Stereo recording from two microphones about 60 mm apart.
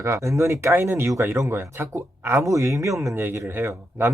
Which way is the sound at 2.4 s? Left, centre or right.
Right.